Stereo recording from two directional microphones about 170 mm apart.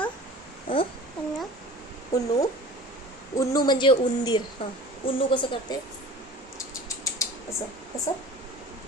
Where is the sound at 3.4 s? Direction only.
25° left (ahead or behind).